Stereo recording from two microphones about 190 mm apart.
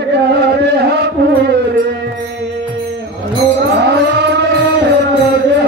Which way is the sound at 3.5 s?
60° right (ahead or behind).